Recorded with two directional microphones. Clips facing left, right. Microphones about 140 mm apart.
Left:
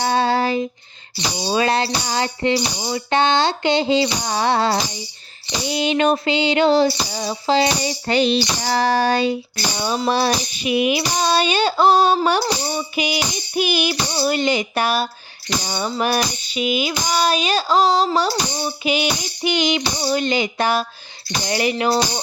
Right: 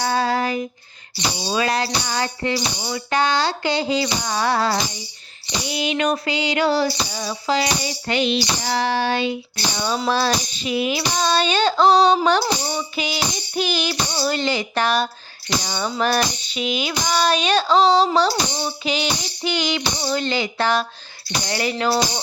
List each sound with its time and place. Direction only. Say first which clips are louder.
0.0 s child singing: left 2 dB; 25° left (ahead or behind)
1.5 s speech: left 3 dB; 30° left (ahead or behind)
5.6 s tambourine: left 4 dB; 30° left (ahead or behind)
10.1 s child singing: left 2 dB; 15° left (ahead or behind)
14.8 s a sound: right 2 dB; 5° left (ahead or behind)
15.6 s child singing: left 3 dB; 10° left (ahead or behind)
16.0 s a sound: right 1 dB; 5° left (ahead or behind)
20.0 s child singing: left 3 dB; 15° left (ahead or behind)